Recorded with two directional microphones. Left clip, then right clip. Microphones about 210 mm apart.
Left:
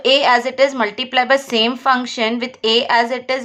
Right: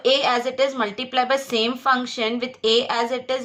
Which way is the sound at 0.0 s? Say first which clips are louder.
Left 6 dB; 25° left (ahead or behind).